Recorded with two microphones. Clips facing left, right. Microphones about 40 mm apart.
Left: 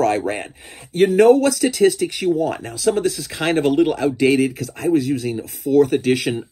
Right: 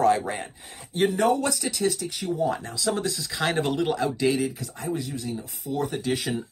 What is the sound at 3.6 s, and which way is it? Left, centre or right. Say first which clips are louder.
Speech: left 11 dB; left.